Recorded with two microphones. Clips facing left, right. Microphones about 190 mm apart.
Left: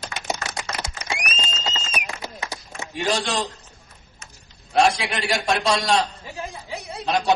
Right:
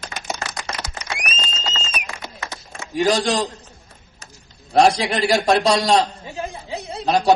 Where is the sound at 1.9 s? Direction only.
15° left (ahead or behind).